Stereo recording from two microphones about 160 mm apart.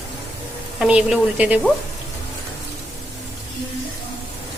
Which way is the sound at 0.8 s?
5° right (ahead or behind).